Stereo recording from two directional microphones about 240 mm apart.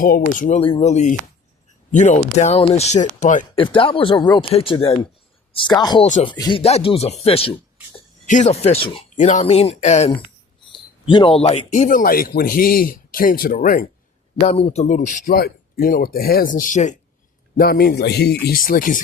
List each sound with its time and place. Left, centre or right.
0.0 s speech: left; by 6.1 s centre
6.1 s a man's voice: left
6.3 s a man's voice: centre; by 19.0 s left